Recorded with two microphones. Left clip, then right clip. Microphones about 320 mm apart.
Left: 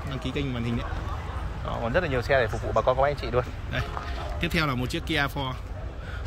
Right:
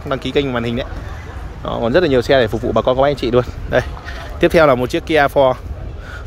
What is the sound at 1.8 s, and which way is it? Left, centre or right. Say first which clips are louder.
Speech: right 12 dB; right.